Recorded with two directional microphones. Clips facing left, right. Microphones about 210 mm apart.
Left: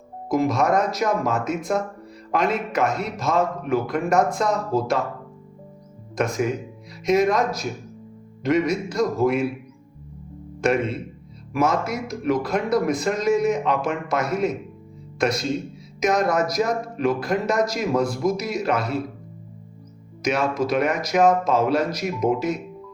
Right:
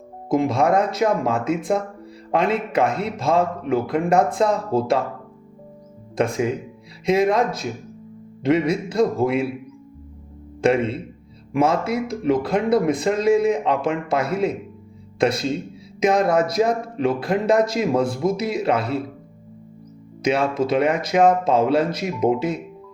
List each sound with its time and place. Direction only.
0.3 s speech: 30° right (ahead or behind)
6.1 s speech: 30° right (ahead or behind)
10.6 s speech: 30° right (ahead or behind)
20.2 s speech: 30° right (ahead or behind)